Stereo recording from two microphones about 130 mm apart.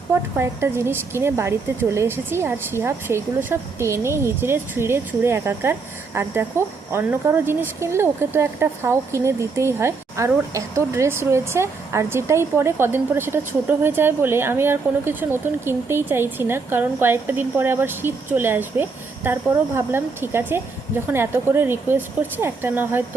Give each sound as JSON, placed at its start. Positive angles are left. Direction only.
{"t": 0.1, "sound": "a woman's voice", "side_deg": -20}